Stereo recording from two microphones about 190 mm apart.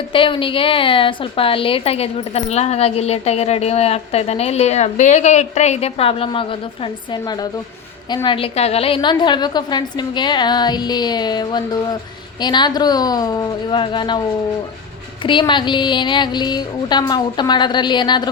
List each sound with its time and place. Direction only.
0.1 s a woman's voice: 25° left (ahead or behind)
15.2 s a woman's voice: 25° left (ahead or behind)